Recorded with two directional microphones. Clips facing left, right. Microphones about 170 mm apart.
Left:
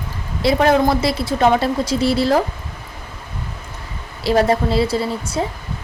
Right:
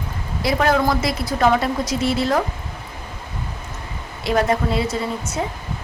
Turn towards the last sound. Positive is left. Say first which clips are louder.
# left 4 dB
turn(degrees=30)  # may be behind; listen again after turning